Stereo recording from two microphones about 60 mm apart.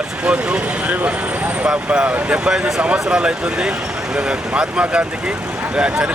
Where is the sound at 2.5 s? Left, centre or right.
Centre.